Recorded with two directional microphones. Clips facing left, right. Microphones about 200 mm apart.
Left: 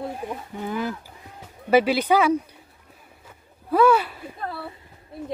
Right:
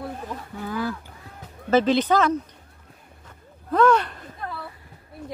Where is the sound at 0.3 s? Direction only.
20° left (ahead or behind).